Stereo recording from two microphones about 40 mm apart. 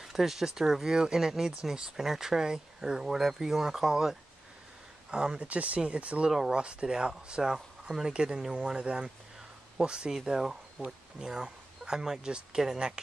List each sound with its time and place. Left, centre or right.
0.0 s speech: centre
5.1 s speech: right